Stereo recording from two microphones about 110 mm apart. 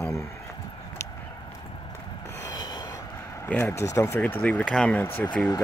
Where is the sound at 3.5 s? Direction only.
20° left (ahead or behind).